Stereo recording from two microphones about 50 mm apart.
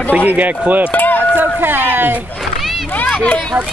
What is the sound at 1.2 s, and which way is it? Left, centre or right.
Speech, right.